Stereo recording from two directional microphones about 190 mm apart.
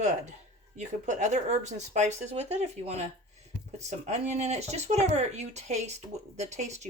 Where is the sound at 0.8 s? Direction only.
40° right (ahead or behind).